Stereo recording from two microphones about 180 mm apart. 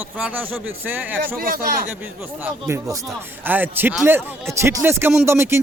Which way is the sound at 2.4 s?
15° right (ahead or behind).